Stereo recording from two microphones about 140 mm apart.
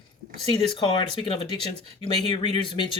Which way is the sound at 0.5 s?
40° left (ahead or behind).